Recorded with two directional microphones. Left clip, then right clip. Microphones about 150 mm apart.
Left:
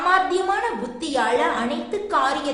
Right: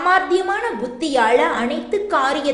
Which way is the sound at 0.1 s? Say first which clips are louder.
Right 3 dB; 20° right (ahead or behind).